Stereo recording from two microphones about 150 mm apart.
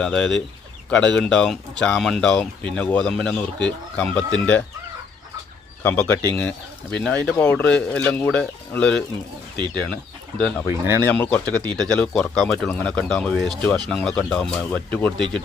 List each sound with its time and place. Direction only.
0.0 s speech: 5° left (ahead or behind)
5.8 s speech: 15° left (ahead or behind)
10.7 s speech: 20° right (ahead or behind)
11.0 s speech: 10° left (ahead or behind)